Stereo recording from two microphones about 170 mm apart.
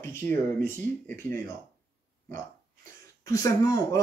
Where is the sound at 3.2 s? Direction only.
20° left (ahead or behind).